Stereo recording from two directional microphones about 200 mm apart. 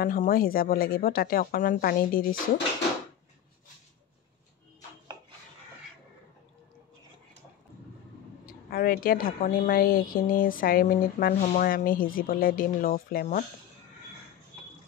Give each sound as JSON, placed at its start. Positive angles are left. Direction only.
{"t": 0.0, "sound": "a woman's voice", "side_deg": 45}
{"t": 8.5, "sound": "a woman's voice", "side_deg": 45}